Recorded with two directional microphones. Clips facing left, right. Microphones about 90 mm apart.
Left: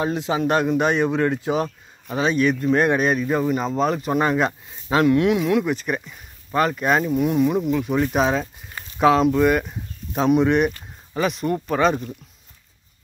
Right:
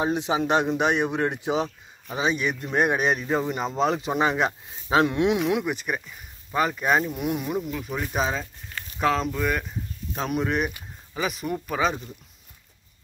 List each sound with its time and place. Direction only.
0.0 s speech: 20° right (ahead or behind); by 8.5 s 5° left (ahead or behind)
8.6 s a sound: 20° left (ahead or behind)
9.0 s speech: 5° left (ahead or behind)